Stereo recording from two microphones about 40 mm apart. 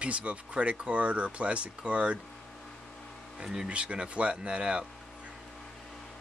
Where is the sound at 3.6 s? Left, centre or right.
Right.